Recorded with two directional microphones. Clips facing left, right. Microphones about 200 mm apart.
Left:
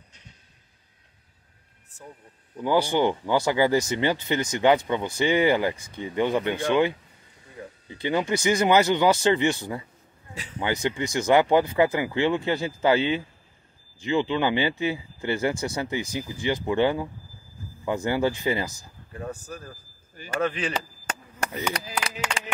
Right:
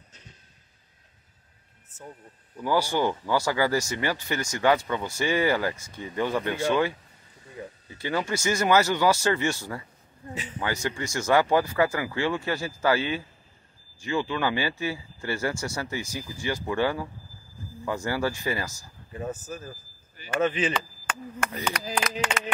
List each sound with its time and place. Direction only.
2.5 s speech: 20° left (ahead or behind)
19.1 s speech: 5° right (ahead or behind)
20.7 s chop: 40° left (ahead or behind)
21.5 s speech: 15° left (ahead or behind)